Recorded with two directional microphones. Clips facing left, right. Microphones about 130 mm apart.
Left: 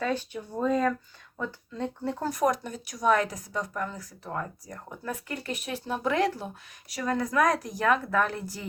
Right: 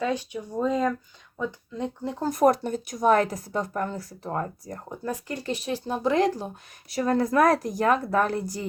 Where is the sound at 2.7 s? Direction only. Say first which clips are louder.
Right 4 dB; 50° right (ahead or behind).